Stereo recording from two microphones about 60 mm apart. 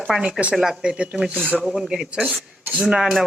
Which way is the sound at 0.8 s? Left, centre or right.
Centre.